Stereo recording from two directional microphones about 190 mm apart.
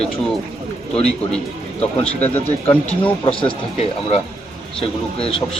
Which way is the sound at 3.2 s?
25° left (ahead or behind).